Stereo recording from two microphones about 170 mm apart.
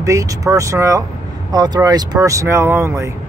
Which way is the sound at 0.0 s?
20° right (ahead or behind).